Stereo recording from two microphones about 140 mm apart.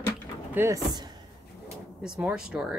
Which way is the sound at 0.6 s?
15° right (ahead or behind).